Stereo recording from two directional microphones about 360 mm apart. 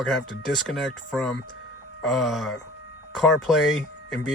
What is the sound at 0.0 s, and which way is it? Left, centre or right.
Speech, centre.